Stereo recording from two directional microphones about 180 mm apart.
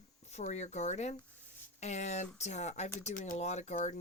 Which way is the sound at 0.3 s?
40° left (ahead or behind).